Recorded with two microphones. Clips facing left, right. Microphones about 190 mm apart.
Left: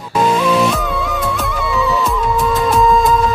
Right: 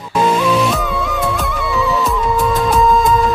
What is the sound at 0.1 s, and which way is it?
Music, centre (ahead or behind).